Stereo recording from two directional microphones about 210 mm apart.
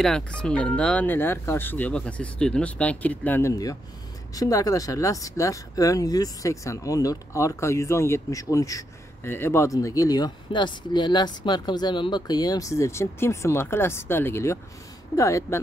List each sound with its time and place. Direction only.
0.0 s speech: 5° left (ahead or behind)